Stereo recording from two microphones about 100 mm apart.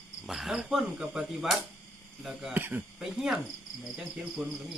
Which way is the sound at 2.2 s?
5° right (ahead or behind).